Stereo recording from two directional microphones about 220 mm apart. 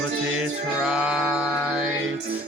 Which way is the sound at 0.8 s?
5° right (ahead or behind).